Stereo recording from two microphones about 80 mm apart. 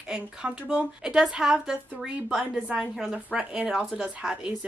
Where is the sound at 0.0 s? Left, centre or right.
Centre.